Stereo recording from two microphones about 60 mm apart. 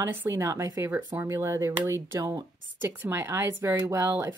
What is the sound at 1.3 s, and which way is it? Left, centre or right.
Speech, right.